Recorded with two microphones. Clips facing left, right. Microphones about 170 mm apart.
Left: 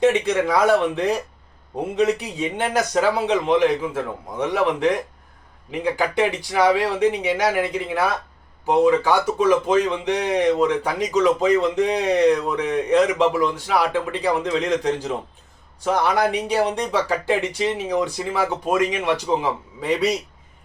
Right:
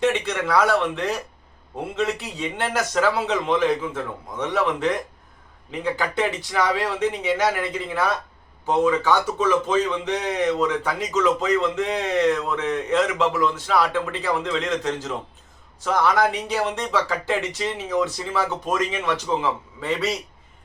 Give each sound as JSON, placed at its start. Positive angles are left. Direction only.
{"t": 0.0, "sound": "speech", "side_deg": 15}